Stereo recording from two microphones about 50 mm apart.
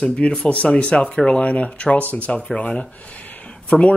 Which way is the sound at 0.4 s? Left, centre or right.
Left.